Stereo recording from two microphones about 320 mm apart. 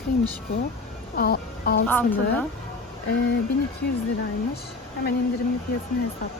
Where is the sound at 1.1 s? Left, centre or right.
Left.